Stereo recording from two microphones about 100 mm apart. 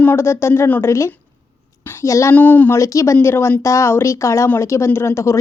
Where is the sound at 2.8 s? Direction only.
30° left (ahead or behind).